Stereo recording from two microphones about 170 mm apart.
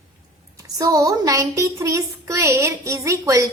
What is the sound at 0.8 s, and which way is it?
A child's voice, 20° right (ahead or behind).